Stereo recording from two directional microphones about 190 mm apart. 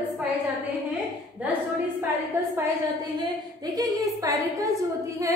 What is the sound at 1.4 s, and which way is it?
Speech, 5° right (ahead or behind).